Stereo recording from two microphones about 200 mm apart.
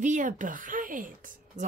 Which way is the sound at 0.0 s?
40° right (ahead or behind).